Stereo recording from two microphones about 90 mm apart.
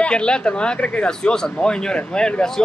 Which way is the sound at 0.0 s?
10° left (ahead or behind).